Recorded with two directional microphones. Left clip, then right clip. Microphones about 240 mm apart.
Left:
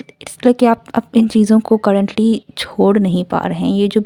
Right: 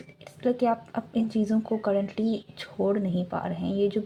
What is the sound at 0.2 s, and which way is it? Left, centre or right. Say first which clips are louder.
Speech: left 13 dB; left.